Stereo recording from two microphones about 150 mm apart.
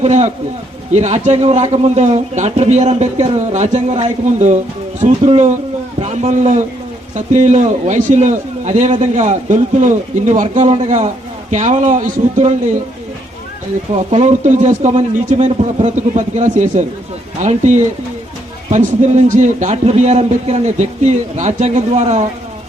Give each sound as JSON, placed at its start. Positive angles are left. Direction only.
{"t": 0.0, "sound": "a man's voice", "side_deg": -50}
{"t": 13.9, "sound": "a man's voice", "side_deg": -45}